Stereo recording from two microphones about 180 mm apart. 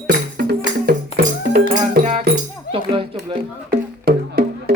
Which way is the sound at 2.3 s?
65° right (ahead or behind).